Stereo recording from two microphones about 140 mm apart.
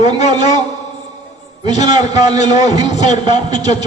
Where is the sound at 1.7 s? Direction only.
55° left (ahead or behind).